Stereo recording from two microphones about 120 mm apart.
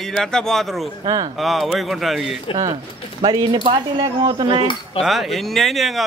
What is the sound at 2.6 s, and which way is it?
Speech, 45° right (ahead or behind).